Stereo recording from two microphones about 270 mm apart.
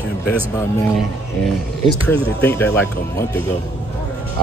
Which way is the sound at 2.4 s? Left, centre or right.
Centre.